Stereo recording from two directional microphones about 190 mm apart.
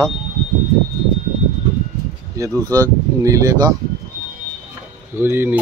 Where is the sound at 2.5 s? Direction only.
15° right (ahead or behind).